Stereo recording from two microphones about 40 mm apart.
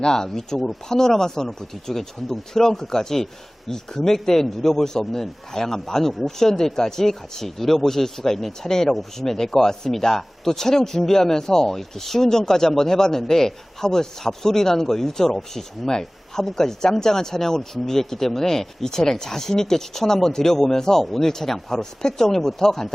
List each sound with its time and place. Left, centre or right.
0.0 s speech: centre